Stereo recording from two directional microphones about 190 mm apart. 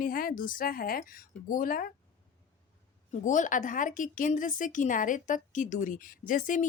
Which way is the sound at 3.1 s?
40° left (ahead or behind).